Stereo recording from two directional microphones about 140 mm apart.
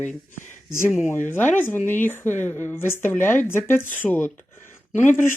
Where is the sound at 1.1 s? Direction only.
15° left (ahead or behind).